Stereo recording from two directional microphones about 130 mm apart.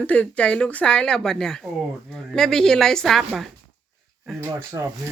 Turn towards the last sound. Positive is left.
turn(degrees=-20)  # may be behind; listen again after turning